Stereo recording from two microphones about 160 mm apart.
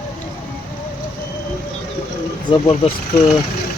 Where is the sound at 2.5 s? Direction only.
35° left (ahead or behind).